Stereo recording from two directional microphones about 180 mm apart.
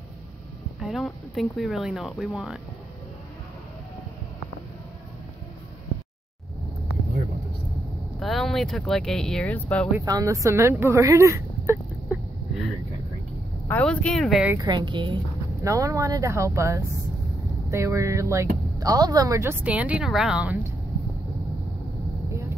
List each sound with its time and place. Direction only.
0.7 s speech: centre (ahead or behind)
8.2 s speech: centre (ahead or behind)
9.9 s speech: 20° right (ahead or behind)
13.7 s speech: 10° left (ahead or behind)
14.5 s speech: 20° right (ahead or behind)